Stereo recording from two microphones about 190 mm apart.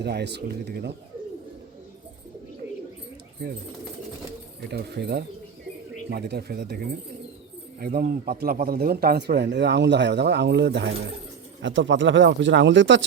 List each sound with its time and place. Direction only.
0.0 s speech: 60° right (ahead or behind)
4.7 s speech: 60° right (ahead or behind)
7.8 s speech: 55° right (ahead or behind); by 13.0 s 75° right (ahead or behind)